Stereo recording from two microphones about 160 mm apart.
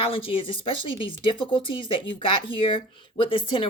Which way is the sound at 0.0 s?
35° left (ahead or behind).